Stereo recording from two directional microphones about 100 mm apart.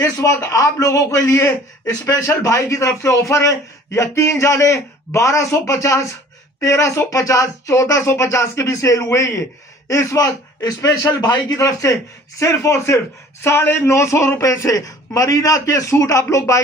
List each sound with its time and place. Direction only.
0.0 s a man's voice: 35° left (ahead or behind)